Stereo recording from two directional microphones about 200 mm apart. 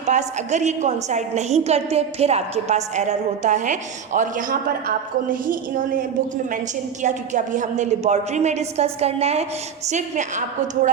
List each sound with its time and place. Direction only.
0.0 s a woman's voice: 35° right (ahead or behind)